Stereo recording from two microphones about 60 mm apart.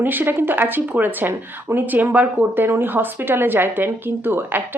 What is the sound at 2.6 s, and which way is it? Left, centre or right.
Speech, right.